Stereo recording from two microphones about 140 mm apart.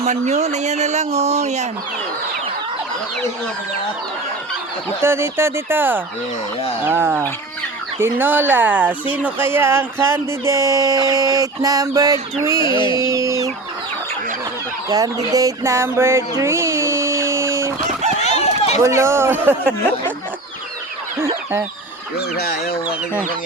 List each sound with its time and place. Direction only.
0.0 s speech: 55° right (ahead or behind)
5.0 s speech: 20° right (ahead or behind)
12.6 s speech: 35° left (ahead or behind)
13.0 s speech: 25° right (ahead or behind)
14.8 s a sound: 25° right (ahead or behind)
18.2 s run: 50° left (ahead or behind)
18.8 s speech: 20° right (ahead or behind)